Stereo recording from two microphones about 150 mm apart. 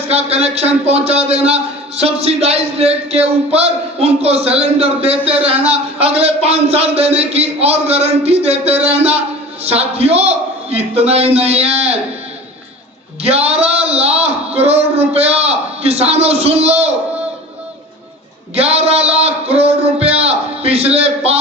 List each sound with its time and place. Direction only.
0.1 s a man's voice: 45° right (ahead or behind)
13.2 s a man's voice: 45° right (ahead or behind)
18.5 s a sound: 45° right (ahead or behind)